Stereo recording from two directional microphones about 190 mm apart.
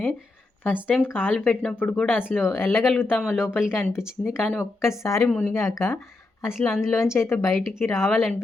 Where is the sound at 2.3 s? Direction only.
5° right (ahead or behind).